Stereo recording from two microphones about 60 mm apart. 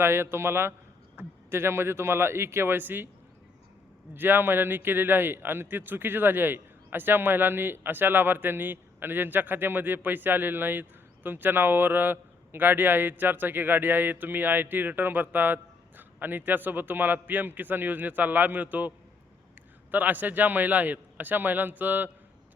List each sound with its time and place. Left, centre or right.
0.0 s speech: right
4.1 s a man's voice: right